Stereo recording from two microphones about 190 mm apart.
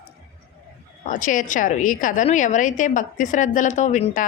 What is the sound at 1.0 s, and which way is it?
A woman's voice, 45° left (ahead or behind).